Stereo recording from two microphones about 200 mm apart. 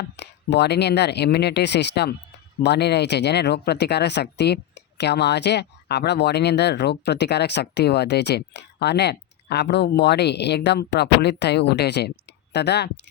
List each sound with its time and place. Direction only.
0.5 s speech: 55° left (ahead or behind)